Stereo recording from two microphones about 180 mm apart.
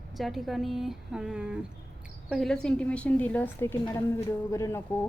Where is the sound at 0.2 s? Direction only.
Centre (ahead or behind).